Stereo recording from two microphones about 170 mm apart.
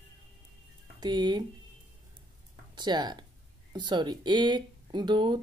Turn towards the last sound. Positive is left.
turn(degrees=-25)  # may be behind; listen again after turning